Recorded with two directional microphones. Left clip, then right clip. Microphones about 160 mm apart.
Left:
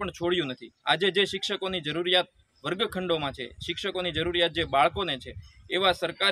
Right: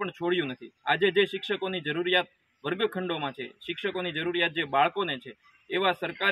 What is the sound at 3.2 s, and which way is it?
Speech, 45° left (ahead or behind).